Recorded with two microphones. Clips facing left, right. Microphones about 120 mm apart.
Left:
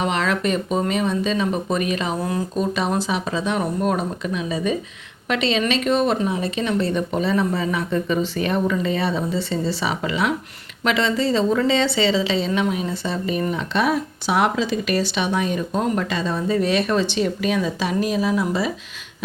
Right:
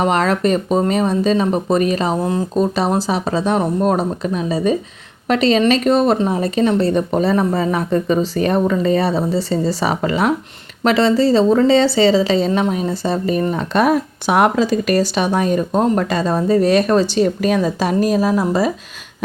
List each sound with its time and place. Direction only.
0.0 s a woman's voice: 40° right (ahead or behind)